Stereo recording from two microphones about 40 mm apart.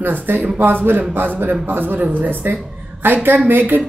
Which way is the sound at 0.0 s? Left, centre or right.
Right.